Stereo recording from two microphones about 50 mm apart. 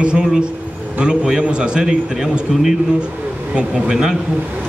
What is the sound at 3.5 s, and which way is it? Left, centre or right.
Speech, centre.